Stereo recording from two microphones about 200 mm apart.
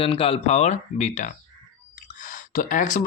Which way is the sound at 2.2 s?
40° left (ahead or behind).